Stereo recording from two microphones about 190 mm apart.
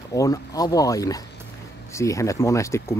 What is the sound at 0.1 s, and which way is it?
Speech, 20° left (ahead or behind).